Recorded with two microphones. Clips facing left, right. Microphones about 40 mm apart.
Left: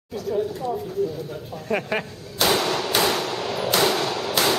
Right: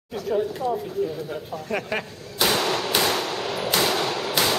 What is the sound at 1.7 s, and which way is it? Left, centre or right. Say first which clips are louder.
Speech: left 3 dB; centre.